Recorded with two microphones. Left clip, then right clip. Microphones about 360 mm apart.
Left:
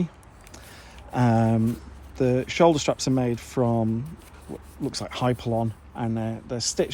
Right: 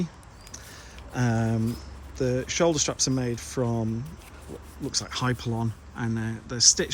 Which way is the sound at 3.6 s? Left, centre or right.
Left.